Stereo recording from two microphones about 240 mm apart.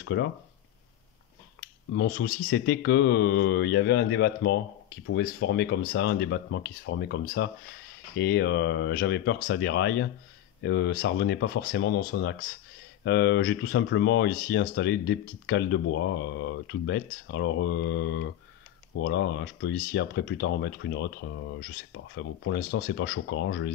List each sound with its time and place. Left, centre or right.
0.0 s speech: left
2.0 s speech: left